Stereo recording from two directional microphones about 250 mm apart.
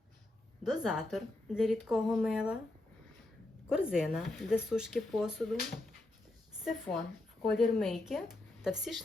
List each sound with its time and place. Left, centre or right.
0.6 s speech: centre
3.7 s speech: centre